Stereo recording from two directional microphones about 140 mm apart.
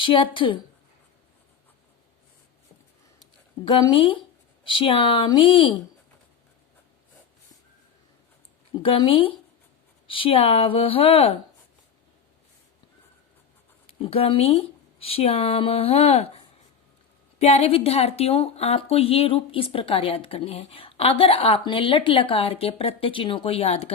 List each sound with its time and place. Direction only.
0.0 s speech: 35° left (ahead or behind)
3.2 s a sound: 35° left (ahead or behind)
4.6 s speech: 35° left (ahead or behind)
8.8 s a woman's voice: 40° left (ahead or behind)
13.8 s speech: 45° left (ahead or behind)
17.4 s a woman's voice: 45° left (ahead or behind)